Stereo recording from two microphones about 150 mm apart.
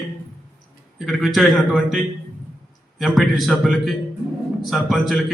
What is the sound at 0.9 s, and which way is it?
A man's voice, centre (ahead or behind).